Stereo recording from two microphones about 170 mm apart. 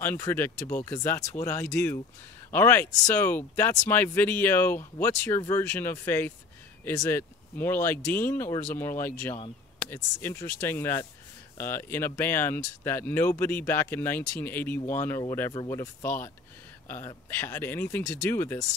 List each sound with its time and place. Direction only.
0.0 s speech: 10° left (ahead or behind)